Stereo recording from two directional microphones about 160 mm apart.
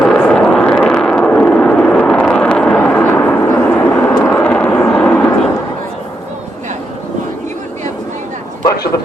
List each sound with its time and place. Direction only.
0.0 s vehicle: 5° left (ahead or behind)